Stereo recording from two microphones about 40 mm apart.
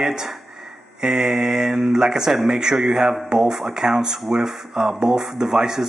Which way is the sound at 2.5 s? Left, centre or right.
Centre.